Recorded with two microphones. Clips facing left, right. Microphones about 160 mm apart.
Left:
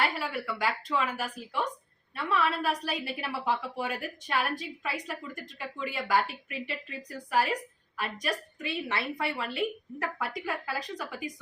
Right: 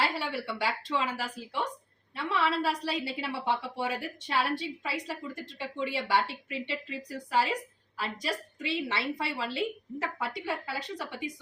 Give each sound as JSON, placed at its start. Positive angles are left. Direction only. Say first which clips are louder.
{"t": 0.0, "sound": "a woman's voice", "louder": "even", "side_deg": -30}
{"t": 2.1, "sound": "a woman's voice", "louder": "even", "side_deg": -30}